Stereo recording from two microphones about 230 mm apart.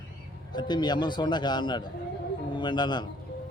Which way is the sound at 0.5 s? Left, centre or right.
Centre.